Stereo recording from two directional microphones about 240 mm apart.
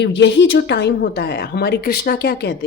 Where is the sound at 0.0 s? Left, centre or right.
Left.